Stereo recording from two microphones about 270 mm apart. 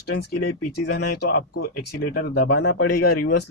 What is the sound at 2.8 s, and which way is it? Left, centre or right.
Speech, left.